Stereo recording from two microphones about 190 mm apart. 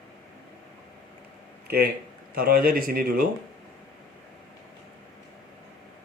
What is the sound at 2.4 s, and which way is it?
Speech, 50° right (ahead or behind).